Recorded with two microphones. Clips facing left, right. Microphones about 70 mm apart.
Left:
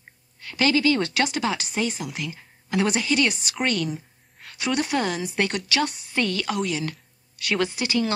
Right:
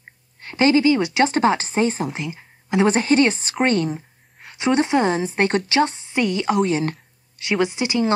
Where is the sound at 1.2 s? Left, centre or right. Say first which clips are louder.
Right 8 dB; right.